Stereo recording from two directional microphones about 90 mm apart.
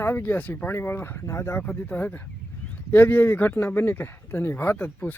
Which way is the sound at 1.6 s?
15° left (ahead or behind).